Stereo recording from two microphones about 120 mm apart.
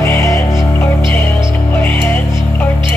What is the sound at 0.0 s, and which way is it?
Music, 20° left (ahead or behind).